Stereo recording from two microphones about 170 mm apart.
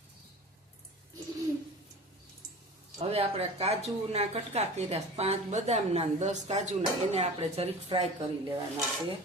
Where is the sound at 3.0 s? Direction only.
35° right (ahead or behind).